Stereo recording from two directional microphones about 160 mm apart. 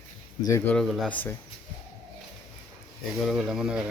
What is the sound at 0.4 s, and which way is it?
Speech, 15° left (ahead or behind).